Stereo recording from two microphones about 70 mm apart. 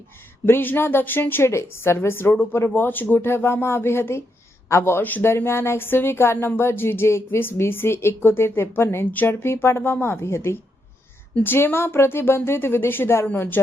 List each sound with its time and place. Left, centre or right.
0.4 s speech: left
5.0 s speech: left